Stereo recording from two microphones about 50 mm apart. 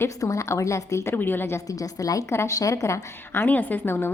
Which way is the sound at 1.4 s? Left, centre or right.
Left.